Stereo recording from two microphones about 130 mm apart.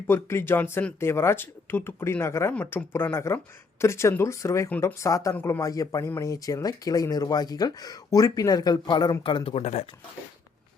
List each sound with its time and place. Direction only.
0.1 s speech: 20° left (ahead or behind); by 9.8 s 50° left (ahead or behind)